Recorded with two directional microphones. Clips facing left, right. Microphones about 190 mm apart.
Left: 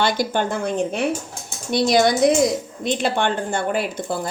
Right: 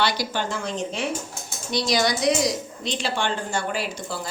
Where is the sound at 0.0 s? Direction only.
50° left (ahead or behind).